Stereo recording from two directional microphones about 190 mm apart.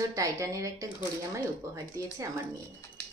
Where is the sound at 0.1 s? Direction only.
15° right (ahead or behind).